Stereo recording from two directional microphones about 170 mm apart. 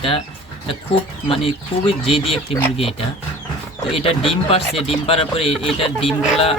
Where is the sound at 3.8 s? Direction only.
35° left (ahead or behind).